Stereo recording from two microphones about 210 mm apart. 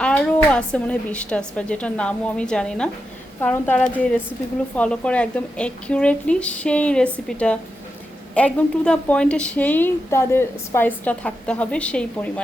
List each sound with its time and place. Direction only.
0.0 s a woman's voice: 5° left (ahead or behind)